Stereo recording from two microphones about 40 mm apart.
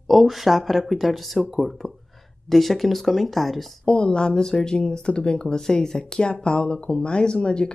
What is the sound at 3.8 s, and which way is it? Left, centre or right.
Speech, left.